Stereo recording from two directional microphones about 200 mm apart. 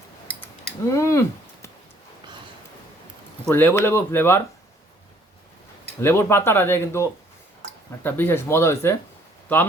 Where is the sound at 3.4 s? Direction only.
10° left (ahead or behind).